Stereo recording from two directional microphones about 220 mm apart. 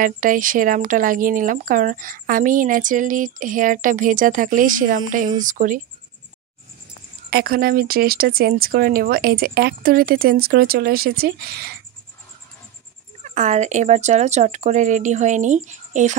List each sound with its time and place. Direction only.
0.0 s speech: 40° right (ahead or behind)
7.2 s speech: 45° right (ahead or behind)
13.2 s speech: 35° right (ahead or behind)